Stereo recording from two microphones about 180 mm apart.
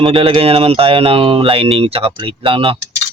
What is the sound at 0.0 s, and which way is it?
Speech, 30° right (ahead or behind).